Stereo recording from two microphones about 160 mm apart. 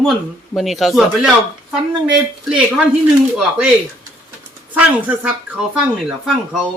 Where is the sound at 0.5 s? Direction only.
Centre (ahead or behind).